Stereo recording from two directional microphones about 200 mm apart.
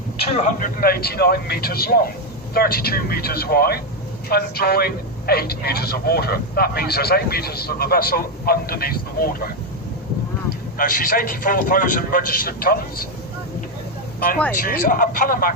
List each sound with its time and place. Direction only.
0.2 s a man's voice: 35° left (ahead or behind)
10.8 s a man's voice: 45° left (ahead or behind)
14.6 s a man's voice: 45° left (ahead or behind)